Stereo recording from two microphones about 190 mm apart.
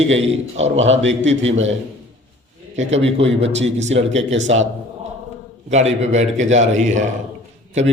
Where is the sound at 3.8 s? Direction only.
35° right (ahead or behind).